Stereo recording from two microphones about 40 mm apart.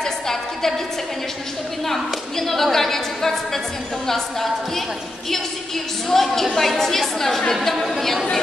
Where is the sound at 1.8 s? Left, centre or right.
Centre.